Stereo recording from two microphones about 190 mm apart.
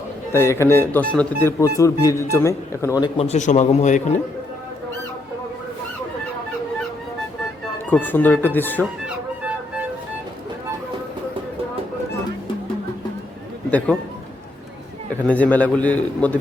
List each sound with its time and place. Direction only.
0.3 s speech: 15° left (ahead or behind)
3.2 s a man's voice: 35° left (ahead or behind)
7.9 s speech: 10° left (ahead or behind)
13.7 s a man's voice: 5° left (ahead or behind)
15.3 s speech: 10° left (ahead or behind)